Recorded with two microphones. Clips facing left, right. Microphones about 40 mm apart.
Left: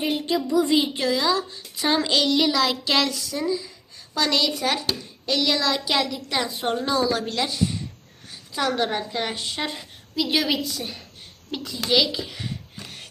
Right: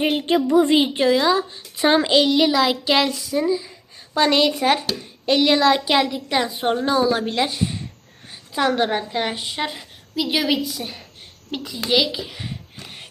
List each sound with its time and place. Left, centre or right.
0.0 s speech: right
0.9 s a child's voice: right
2.1 s a woman's voice: centre
4.1 s a child's voice: right; by 12.9 s centre